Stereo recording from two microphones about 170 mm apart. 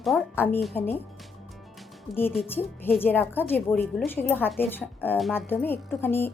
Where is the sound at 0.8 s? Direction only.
10° left (ahead or behind).